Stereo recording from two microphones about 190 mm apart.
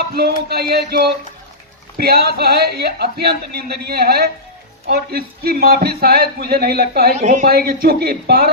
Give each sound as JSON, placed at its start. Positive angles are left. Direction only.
{"t": 0.4, "sound": "a man's voice", "side_deg": -55}
{"t": 7.2, "sound": "speech", "side_deg": -40}
{"t": 7.4, "sound": "speech", "side_deg": -55}